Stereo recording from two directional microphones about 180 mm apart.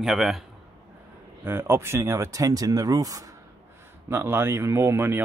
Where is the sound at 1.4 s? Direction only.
10° right (ahead or behind).